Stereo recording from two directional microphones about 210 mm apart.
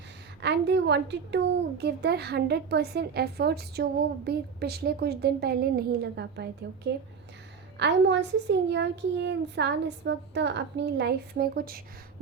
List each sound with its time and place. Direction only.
0.4 s a woman's voice: 55° right (ahead or behind)
7.8 s a child's voice: 55° right (ahead or behind)